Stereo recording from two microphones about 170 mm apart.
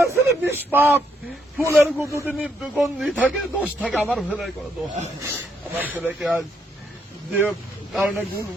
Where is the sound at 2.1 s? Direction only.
15° right (ahead or behind).